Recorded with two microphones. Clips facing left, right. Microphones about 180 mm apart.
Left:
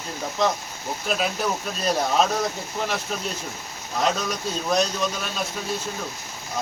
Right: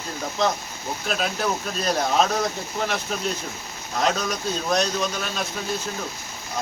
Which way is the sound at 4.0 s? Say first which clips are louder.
Right 1 dB; centre (ahead or behind).